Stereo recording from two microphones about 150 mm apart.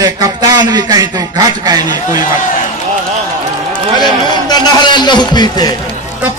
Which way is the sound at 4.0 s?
25° left (ahead or behind).